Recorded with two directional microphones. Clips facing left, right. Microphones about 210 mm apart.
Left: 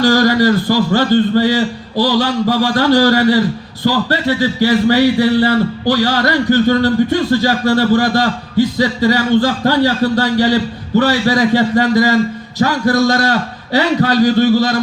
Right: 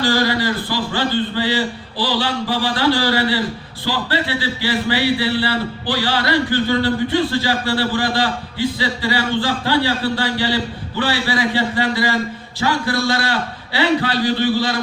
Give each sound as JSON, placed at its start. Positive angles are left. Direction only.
{"t": 0.0, "sound": "speech", "side_deg": 45}